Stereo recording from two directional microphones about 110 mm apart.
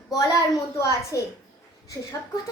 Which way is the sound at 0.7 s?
25° left (ahead or behind).